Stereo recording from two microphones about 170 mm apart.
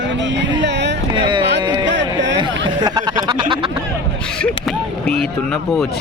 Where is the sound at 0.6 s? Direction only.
90° right.